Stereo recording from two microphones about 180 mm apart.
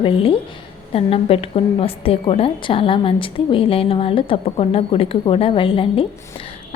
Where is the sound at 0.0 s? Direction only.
30° left (ahead or behind).